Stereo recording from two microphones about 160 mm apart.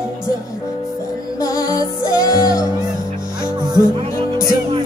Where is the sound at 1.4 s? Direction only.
20° left (ahead or behind).